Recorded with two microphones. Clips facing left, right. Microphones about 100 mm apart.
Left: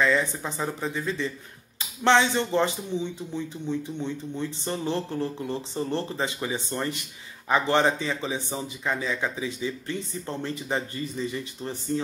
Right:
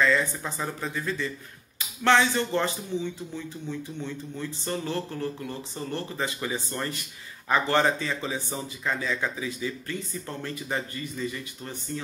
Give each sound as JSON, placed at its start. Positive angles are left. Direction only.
{"t": 0.0, "sound": "speech", "side_deg": 15}